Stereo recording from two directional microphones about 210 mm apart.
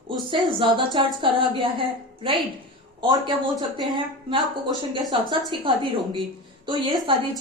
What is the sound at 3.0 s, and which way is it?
Speech, 20° right (ahead or behind).